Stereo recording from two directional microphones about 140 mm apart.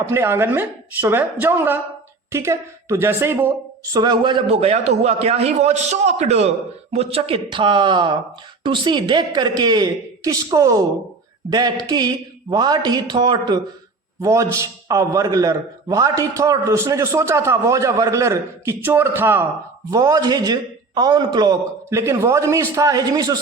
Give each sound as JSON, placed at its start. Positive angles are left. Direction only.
{"t": 0.0, "sound": "a woman's voice", "side_deg": -20}
{"t": 3.9, "sound": "a man's voice", "side_deg": -30}